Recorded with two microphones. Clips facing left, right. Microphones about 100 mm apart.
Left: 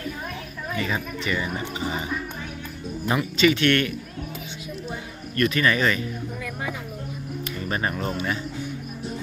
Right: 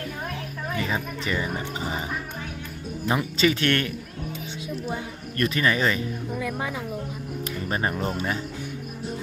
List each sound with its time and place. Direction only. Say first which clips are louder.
0.8 s speech: left 1 dB; 25° right (ahead or behind)
3.2 s speech: left 4 dB; 35° right (ahead or behind)
5.4 s speech: left 2 dB; 25° right (ahead or behind)
7.7 s speech: even; 25° right (ahead or behind)